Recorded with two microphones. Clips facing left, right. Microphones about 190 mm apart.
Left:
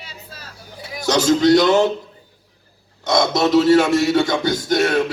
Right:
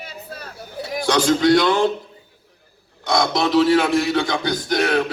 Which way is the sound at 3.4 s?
45° left (ahead or behind).